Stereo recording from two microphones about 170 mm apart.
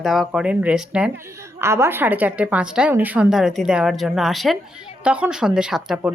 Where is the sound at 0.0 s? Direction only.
Centre (ahead or behind).